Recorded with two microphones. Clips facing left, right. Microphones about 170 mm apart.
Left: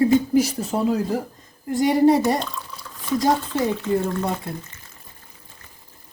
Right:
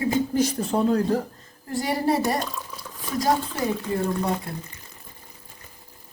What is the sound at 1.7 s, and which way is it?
Speech, 20° left (ahead or behind).